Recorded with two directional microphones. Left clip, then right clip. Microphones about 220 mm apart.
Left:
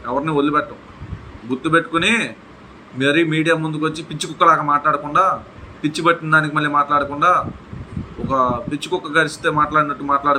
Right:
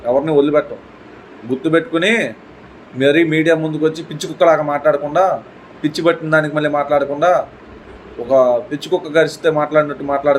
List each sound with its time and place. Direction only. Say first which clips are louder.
0.3 s a man's voice: right 3 dB; 15° left (ahead or behind)
1.6 s a man's voice: right 1 dB; 15° left (ahead or behind)